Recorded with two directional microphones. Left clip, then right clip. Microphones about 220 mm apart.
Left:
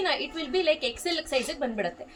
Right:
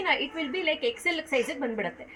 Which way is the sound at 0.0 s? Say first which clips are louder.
Right 1 dB; 25° left (ahead or behind).